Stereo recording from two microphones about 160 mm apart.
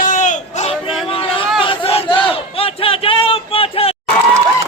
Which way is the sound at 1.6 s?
35° left (ahead or behind).